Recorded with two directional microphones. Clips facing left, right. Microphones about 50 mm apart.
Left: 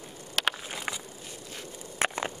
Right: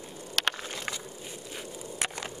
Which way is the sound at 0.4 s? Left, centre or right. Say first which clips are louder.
Left 1 dB; centre.